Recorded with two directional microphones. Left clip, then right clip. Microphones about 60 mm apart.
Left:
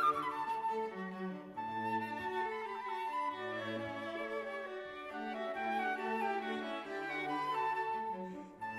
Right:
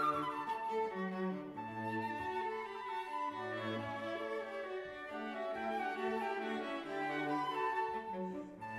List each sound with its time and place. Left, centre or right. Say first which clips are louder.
0.0 s flute: left 3 dB; right
1.9 s flute: right 2 dB; right
5.6 s music: left 4 dB; right
7.2 s music: left 1 dB; right